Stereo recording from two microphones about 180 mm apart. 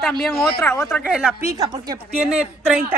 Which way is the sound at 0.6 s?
10° left (ahead or behind).